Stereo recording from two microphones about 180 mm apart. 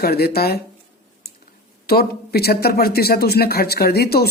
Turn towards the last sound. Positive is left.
turn(degrees=60)  # may be behind; listen again after turning